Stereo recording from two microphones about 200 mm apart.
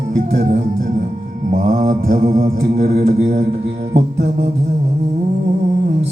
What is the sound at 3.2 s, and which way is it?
Mantra, 35° right (ahead or behind).